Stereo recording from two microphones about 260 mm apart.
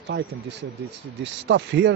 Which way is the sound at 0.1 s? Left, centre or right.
Right.